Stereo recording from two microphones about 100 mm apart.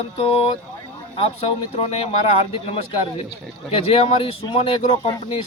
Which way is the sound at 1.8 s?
90° left.